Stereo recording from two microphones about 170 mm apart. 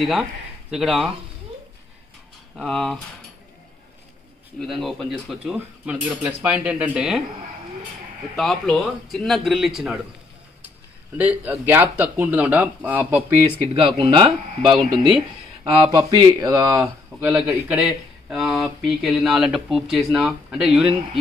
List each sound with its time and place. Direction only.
0.0 s speech: centre (ahead or behind)
2.5 s speech: centre (ahead or behind)
4.6 s speech: centre (ahead or behind)
8.4 s speech: centre (ahead or behind)
11.1 s speech: 10° right (ahead or behind)
13.7 s speech: 30° right (ahead or behind); by 20.9 s centre (ahead or behind)